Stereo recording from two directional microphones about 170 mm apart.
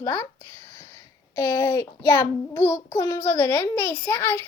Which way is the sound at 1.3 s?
15° left (ahead or behind).